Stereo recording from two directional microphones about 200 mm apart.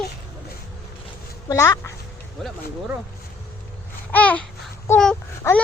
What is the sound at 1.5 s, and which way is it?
Speech, 15° left (ahead or behind).